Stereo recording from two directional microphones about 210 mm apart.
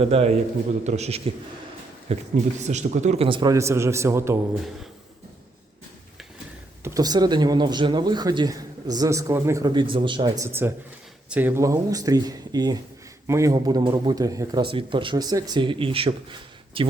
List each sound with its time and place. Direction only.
0.0 s a man's voice: 30° right (ahead or behind); by 4.4 s 10° right (ahead or behind)
6.8 s speech: 15° right (ahead or behind)